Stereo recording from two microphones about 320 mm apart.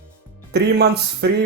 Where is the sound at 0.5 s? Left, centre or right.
Right.